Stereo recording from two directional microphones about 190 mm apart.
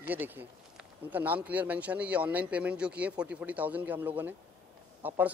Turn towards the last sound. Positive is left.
turn(degrees=-10)  # may be behind; listen again after turning